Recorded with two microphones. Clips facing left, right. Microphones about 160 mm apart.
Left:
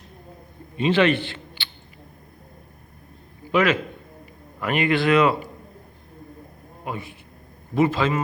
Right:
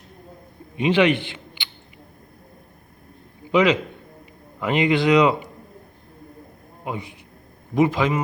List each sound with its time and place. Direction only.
0.8 s a man's voice: 15° right (ahead or behind)
3.5 s a man's voice: 20° right (ahead or behind)
6.8 s speech: 20° right (ahead or behind)